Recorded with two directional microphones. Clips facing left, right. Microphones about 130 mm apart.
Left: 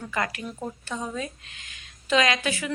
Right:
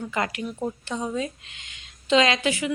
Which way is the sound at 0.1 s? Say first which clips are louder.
Even; 25° right (ahead or behind).